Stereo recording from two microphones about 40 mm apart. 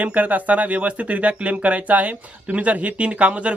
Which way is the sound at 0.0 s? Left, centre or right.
Right.